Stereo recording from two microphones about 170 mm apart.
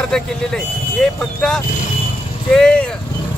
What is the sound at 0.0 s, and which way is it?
Speech, 5° left (ahead or behind).